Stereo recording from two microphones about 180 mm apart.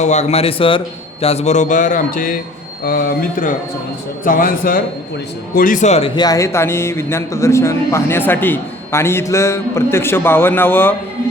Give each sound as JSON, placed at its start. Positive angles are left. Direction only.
{"t": 0.0, "sound": "speech", "side_deg": 40}
{"t": 6.1, "sound": "a man's voice", "side_deg": 20}